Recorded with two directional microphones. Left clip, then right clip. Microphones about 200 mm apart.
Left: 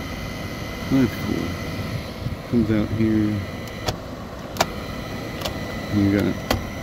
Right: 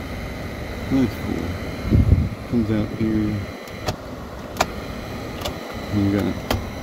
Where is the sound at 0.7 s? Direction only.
20° left (ahead or behind).